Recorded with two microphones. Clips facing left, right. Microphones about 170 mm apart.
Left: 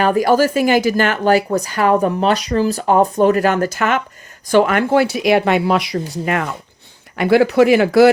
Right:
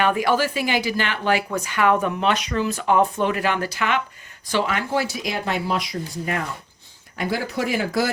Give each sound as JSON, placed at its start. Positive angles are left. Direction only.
{"t": 0.0, "sound": "speech", "side_deg": 40}